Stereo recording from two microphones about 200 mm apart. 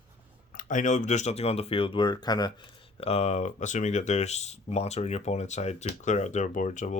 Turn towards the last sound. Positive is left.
turn(degrees=40)  # may be behind; listen again after turning